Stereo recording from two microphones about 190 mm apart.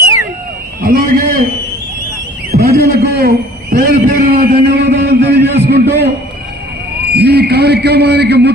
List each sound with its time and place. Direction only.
0.9 s a man's voice: 55° right (ahead or behind)
2.5 s a sound: 55° right (ahead or behind)
7.1 s a man's voice: 60° right (ahead or behind)